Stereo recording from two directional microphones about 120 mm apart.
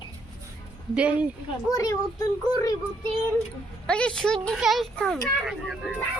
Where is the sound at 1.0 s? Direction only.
10° right (ahead or behind).